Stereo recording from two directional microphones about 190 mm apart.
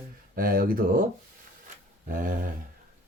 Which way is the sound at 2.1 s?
45° right (ahead or behind).